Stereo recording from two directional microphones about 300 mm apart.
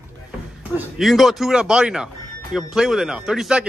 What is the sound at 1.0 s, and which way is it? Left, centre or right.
Speech, centre.